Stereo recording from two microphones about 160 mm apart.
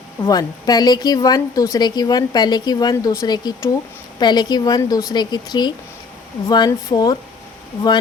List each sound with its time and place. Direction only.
0.3 s a woman's voice: 25° left (ahead or behind)